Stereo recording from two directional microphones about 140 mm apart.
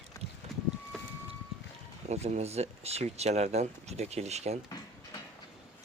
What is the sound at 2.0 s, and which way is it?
Speech, 55° right (ahead or behind).